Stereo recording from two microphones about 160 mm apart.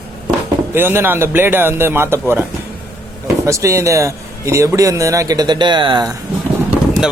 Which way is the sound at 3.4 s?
20° right (ahead or behind).